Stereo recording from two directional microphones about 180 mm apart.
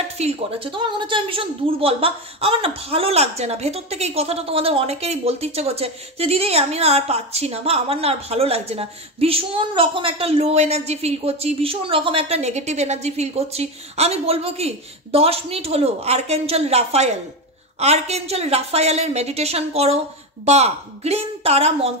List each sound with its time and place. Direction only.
0.2 s a woman's voice: 30° right (ahead or behind)